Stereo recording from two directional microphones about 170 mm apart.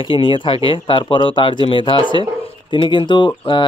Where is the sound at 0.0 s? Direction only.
30° left (ahead or behind).